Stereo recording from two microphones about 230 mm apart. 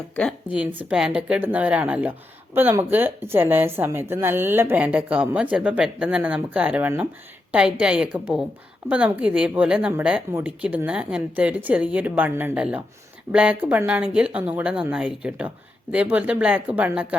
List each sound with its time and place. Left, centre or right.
0.4 s a woman's voice: centre